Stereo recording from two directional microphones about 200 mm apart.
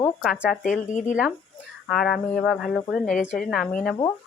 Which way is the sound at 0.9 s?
40° left (ahead or behind).